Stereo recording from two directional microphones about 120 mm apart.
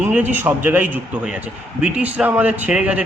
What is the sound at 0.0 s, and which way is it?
Speech, 15° right (ahead or behind).